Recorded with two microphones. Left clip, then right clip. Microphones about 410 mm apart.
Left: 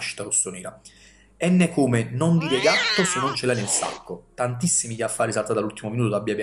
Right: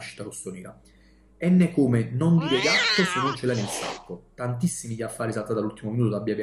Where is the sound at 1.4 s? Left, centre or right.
Centre.